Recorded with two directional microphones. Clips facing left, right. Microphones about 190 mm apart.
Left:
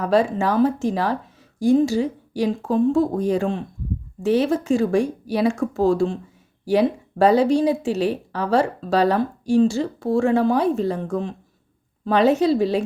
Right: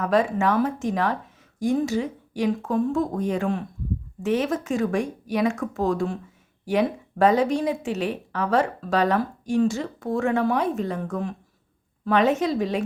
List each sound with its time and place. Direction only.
0.0 s a woman's voice: 30° left (ahead or behind)